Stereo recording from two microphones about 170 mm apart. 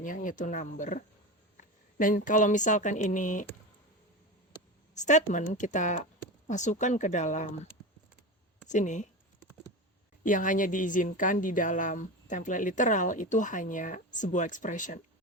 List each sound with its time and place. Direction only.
0.0 s a woman's voice: 50° left (ahead or behind)
4.9 s a woman's voice: 45° left (ahead or behind)
10.2 s a woman's voice: 50° left (ahead or behind)